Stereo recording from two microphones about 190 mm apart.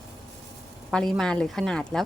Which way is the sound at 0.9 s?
5° left (ahead or behind).